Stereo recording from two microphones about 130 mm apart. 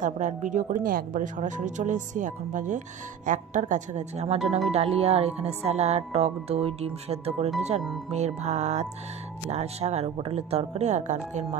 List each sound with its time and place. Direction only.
0.0 s speech: 75° right (ahead or behind)
0.8 s speech: 90° right; by 4.4 s 60° right (ahead or behind)
4.4 s speech: centre (ahead or behind)
4.7 s music: 50° right (ahead or behind)
8.1 s speech: 60° right (ahead or behind)